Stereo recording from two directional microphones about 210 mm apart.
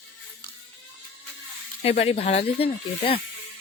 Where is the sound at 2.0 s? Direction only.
30° left (ahead or behind).